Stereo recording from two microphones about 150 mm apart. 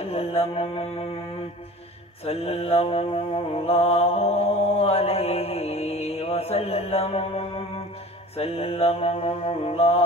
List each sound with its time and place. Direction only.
0.0 s mantra: 40° left (ahead or behind)
2.2 s mantra: 40° left (ahead or behind)